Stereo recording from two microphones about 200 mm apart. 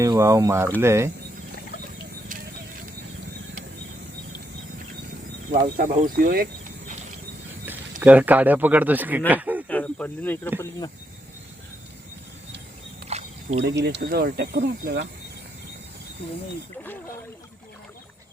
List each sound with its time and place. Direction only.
0.0 s speech: 15° right (ahead or behind)
5.7 s speech: 45° right (ahead or behind)
7.6 s speech: 10° right (ahead or behind)
9.3 s snake: 10° right (ahead or behind)
9.6 s speech: 5° left (ahead or behind)
13.1 s single-lens reflex camera: 35° right (ahead or behind)
13.6 s speech: 60° right (ahead or behind)